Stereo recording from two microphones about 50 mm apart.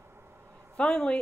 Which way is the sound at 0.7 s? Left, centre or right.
Left.